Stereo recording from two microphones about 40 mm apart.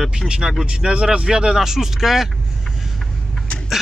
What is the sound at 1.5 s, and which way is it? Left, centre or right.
Speech, centre.